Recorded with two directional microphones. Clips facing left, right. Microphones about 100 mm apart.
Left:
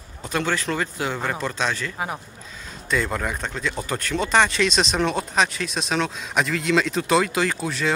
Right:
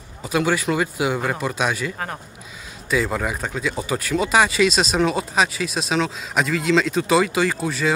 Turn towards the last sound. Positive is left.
turn(degrees=0)  # may be behind; listen again after turning